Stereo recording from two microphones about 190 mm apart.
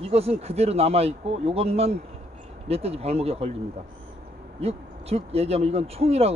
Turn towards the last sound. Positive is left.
turn(degrees=-35)  # may be behind; listen again after turning